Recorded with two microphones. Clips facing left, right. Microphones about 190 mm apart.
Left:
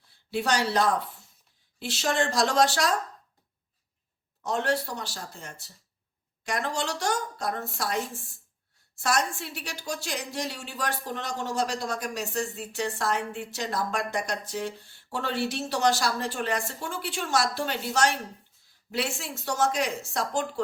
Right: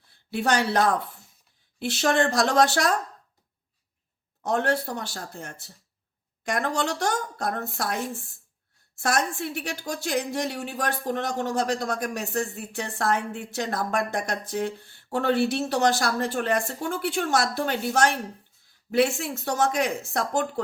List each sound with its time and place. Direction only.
0.3 s a woman's voice: 55° right (ahead or behind)
4.4 s a woman's voice: 55° right (ahead or behind)
9.0 s a woman's voice: 55° right (ahead or behind)